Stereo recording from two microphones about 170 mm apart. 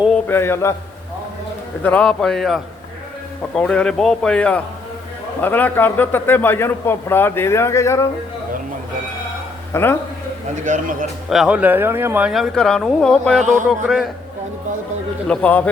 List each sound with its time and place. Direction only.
0.1 s a man's voice: 15° left (ahead or behind)
1.8 s a man's voice: 5° left (ahead or behind)
9.7 s a man's voice: 10° left (ahead or behind)
10.7 s a man's voice: 50° right (ahead or behind)
11.3 s speech: 5° right (ahead or behind)
15.3 s a man's voice: 10° left (ahead or behind)